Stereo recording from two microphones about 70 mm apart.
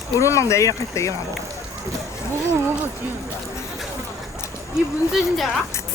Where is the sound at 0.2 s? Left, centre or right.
Left.